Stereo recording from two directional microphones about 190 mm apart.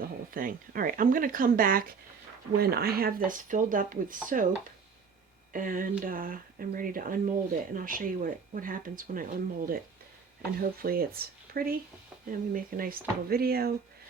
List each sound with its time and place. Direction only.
0.3 s speech: 45° right (ahead or behind)
5.5 s speech: 45° right (ahead or behind)